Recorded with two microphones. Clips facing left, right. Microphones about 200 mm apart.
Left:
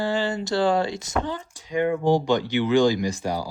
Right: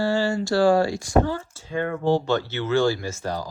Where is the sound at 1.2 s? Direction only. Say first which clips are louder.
Right 3 dB; 20° left (ahead or behind).